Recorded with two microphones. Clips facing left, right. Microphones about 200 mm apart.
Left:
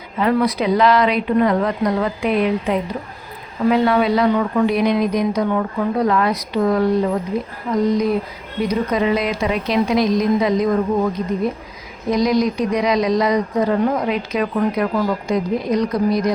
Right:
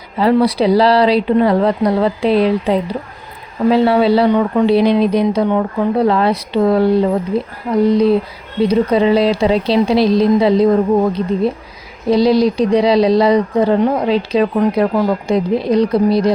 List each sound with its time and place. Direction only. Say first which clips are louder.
0.2 s a woman's voice: right 5 dB; 30° right (ahead or behind)